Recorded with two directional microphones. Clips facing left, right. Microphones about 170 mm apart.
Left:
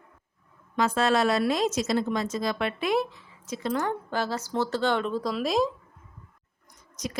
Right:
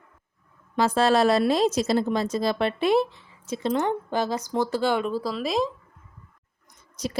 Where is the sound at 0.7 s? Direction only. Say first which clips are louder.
Right 3 dB; 35° right (ahead or behind); by 5.7 s centre (ahead or behind).